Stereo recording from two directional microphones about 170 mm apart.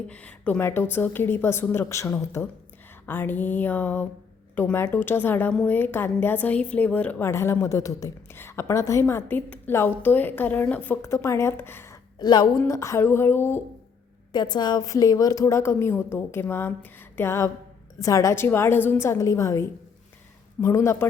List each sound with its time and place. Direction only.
0.1 s a woman's voice: 10° left (ahead or behind)
12.2 s a woman's voice: 25° left (ahead or behind)
14.3 s a woman's voice: 25° left (ahead or behind)